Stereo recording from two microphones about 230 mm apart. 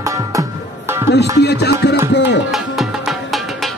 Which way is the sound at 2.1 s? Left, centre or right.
Left.